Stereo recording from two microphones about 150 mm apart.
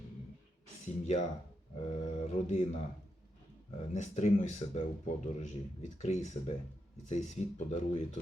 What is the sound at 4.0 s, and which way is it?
Speech, 50° left (ahead or behind).